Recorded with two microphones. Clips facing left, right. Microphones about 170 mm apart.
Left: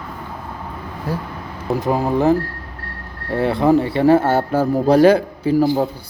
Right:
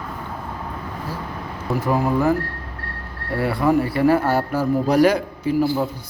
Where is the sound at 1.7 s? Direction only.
20° left (ahead or behind).